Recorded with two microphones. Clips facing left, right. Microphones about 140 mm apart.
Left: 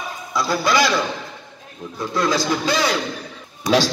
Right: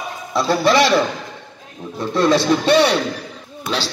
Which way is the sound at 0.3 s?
25° right (ahead or behind).